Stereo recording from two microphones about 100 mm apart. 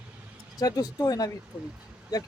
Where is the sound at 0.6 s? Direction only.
35° left (ahead or behind).